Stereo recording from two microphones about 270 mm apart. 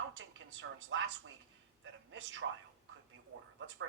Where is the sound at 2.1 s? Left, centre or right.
Right.